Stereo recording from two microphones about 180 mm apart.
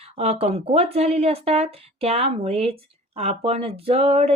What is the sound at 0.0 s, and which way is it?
Speech, 35° right (ahead or behind).